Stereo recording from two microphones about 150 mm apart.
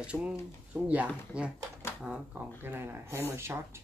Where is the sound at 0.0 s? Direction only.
5° right (ahead or behind).